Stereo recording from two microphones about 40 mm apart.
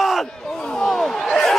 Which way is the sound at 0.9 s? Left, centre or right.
Centre.